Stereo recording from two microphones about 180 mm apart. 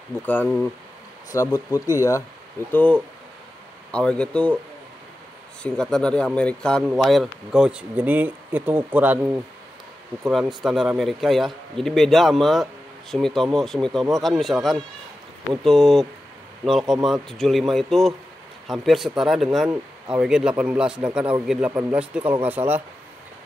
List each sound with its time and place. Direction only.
0.3 s a man's voice: 5° left (ahead or behind)
1.3 s a man's voice: 15° left (ahead or behind)
5.6 s a man's voice: 5° left (ahead or behind)